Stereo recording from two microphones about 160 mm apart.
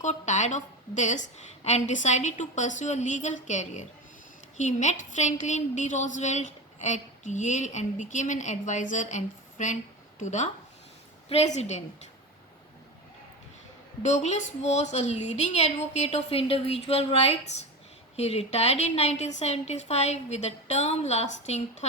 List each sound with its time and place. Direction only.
0.0 s a woman's voice: 45° left (ahead or behind)
14.0 s a woman's voice: 45° left (ahead or behind)